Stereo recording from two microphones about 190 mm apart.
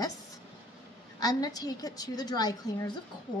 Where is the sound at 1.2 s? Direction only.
20° left (ahead or behind).